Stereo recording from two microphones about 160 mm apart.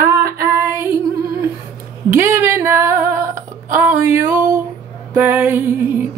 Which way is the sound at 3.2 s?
55° right (ahead or behind).